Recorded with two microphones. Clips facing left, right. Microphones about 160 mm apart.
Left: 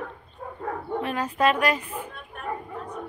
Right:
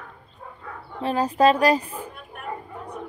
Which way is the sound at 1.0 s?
30° right (ahead or behind).